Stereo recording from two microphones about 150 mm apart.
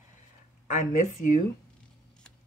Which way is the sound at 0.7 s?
55° left (ahead or behind).